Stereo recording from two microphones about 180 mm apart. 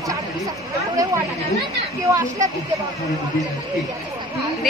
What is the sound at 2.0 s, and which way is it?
Speech, 15° right (ahead or behind).